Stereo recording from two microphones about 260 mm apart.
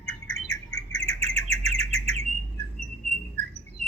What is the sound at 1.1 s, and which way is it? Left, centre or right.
Bird, right.